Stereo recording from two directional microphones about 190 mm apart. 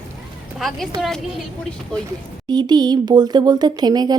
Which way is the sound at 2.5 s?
20° right (ahead or behind).